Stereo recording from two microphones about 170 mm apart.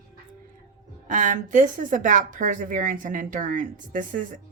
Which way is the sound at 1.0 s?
45° right (ahead or behind).